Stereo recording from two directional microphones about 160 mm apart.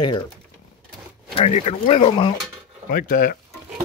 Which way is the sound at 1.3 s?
40° left (ahead or behind).